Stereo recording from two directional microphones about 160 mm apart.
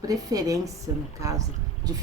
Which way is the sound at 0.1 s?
20° right (ahead or behind).